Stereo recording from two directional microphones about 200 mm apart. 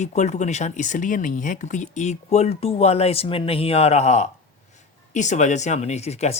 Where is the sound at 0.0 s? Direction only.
35° left (ahead or behind).